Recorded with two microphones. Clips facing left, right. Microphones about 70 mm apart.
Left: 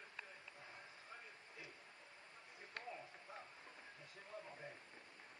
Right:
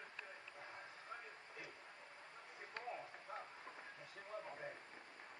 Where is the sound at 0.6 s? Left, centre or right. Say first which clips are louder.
Right 5 dB; right.